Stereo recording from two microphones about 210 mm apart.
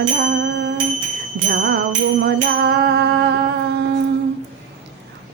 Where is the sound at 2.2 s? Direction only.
50° right (ahead or behind).